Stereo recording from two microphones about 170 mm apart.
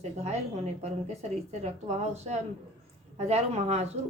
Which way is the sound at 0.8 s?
40° right (ahead or behind).